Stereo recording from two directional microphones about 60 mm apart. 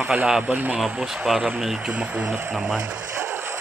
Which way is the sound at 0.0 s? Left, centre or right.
Centre.